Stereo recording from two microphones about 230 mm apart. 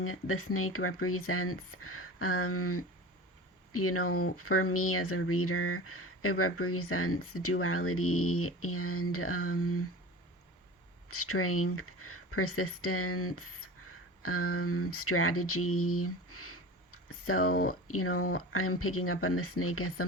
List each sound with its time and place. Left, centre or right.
0.0 s speech: left
11.1 s speech: left